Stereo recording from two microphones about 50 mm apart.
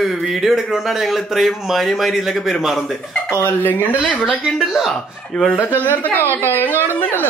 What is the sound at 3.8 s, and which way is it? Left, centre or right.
Speech, left.